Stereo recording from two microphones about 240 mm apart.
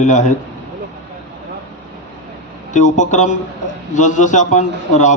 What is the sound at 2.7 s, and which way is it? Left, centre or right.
A man's voice, left.